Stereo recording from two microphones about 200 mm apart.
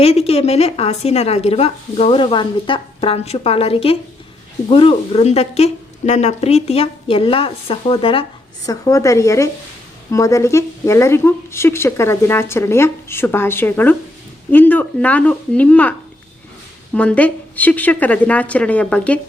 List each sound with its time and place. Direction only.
0.0 s a woman's voice: 30° left (ahead or behind); by 19.2 s 5° left (ahead or behind)